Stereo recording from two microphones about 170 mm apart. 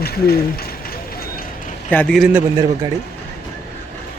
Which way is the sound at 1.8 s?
5° left (ahead or behind).